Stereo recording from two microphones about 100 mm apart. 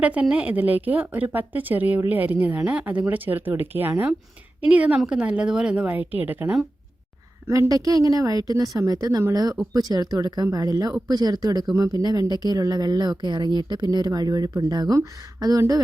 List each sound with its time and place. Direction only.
0.0 s speech: 15° right (ahead or behind)
7.4 s a woman's voice: 30° right (ahead or behind)